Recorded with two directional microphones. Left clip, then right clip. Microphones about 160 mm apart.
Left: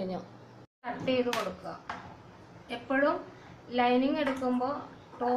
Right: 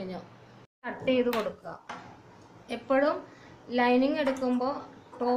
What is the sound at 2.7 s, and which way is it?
Speech, 50° right (ahead or behind).